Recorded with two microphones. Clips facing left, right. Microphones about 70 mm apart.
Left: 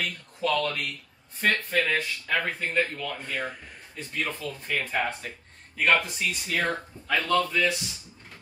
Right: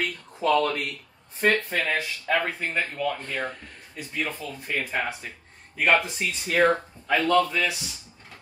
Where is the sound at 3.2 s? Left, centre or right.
Centre.